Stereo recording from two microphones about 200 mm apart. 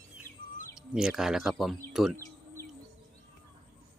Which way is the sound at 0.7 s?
5° right (ahead or behind).